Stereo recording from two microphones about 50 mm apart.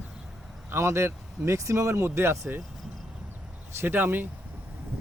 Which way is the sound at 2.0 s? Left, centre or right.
Right.